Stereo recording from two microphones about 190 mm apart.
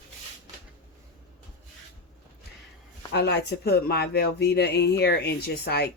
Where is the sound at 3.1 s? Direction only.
60° left (ahead or behind).